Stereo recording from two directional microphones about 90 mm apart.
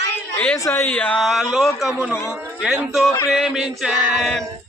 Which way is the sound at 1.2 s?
Centre (ahead or behind).